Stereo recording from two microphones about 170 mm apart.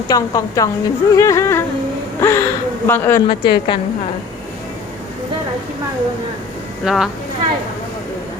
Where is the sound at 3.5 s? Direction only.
30° left (ahead or behind).